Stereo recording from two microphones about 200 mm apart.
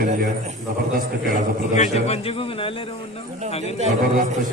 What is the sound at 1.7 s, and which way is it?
A man's voice, 35° left (ahead or behind).